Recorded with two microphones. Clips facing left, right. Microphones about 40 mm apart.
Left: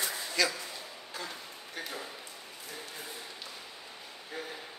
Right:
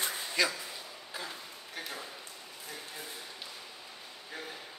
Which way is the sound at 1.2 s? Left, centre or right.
Centre.